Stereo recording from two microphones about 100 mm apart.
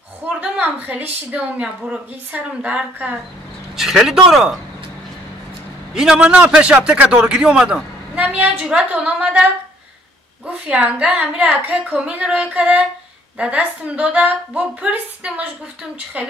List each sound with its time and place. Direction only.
0.4 s a woman's voice: 15° right (ahead or behind)
3.7 s speech: 5° right (ahead or behind)
5.9 s a man's voice: 5° right (ahead or behind)